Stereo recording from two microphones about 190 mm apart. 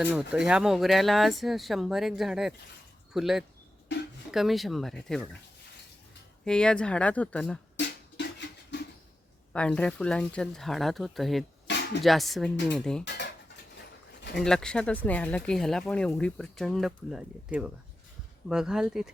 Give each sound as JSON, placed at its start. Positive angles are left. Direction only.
{"t": 0.0, "sound": "speech", "side_deg": -5}
{"t": 6.4, "sound": "speech", "side_deg": 5}
{"t": 7.8, "sound": "beatboxing", "side_deg": 65}
{"t": 9.5, "sound": "speech", "side_deg": 5}
{"t": 14.3, "sound": "speech", "side_deg": 5}